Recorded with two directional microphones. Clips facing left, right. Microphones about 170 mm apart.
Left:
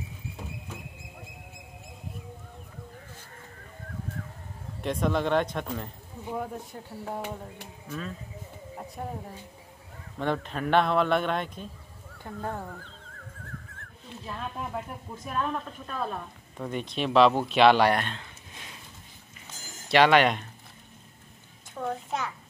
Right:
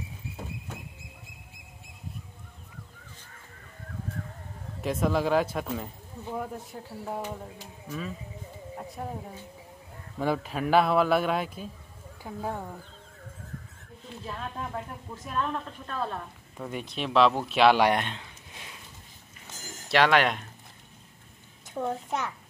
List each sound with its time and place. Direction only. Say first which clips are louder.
4.8 s speech: right 1 dB; 5° right (ahead or behind)
14.2 s speech: left 1 dB; centre (ahead or behind)
15.2 s a woman's voice: even; 10° left (ahead or behind)
16.6 s speech: left 3 dB; 5° right (ahead or behind)
19.9 s speech: left 2 dB; centre (ahead or behind)
21.7 s a child's voice: right 1 dB; 25° right (ahead or behind)